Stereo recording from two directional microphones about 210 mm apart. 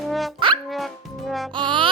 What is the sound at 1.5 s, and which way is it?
Speech, 20° right (ahead or behind).